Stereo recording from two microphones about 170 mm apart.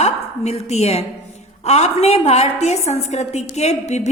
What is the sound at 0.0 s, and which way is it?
A woman's voice, 40° left (ahead or behind).